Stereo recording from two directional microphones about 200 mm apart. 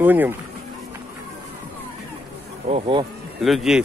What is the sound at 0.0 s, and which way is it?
Speech, 10° right (ahead or behind).